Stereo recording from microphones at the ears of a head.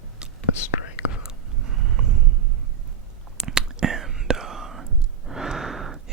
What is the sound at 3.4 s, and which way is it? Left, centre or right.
Whispering, right.